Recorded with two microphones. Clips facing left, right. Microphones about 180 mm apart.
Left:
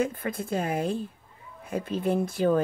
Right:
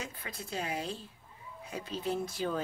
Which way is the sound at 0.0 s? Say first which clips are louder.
Left 14 dB; 50° left (ahead or behind).